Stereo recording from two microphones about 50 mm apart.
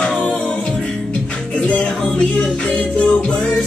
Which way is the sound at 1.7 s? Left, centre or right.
Centre.